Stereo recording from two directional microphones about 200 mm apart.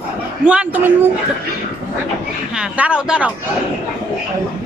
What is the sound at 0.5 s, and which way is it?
Speech, 5° right (ahead or behind).